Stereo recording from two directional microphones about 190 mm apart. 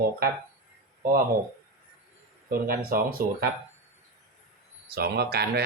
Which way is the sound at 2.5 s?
50° right (ahead or behind).